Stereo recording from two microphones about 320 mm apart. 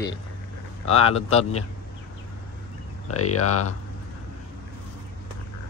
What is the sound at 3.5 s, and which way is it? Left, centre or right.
Speech, left.